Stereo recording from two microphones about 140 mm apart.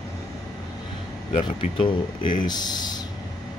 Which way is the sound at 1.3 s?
40° left (ahead or behind).